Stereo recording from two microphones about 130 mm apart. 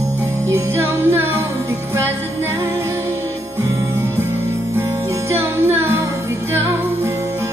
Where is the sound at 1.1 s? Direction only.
15° right (ahead or behind).